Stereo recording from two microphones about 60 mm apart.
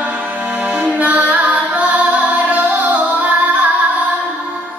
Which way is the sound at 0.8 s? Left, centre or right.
Right.